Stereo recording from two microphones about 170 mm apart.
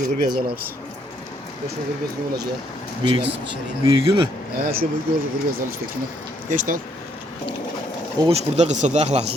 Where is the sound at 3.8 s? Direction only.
30° right (ahead or behind).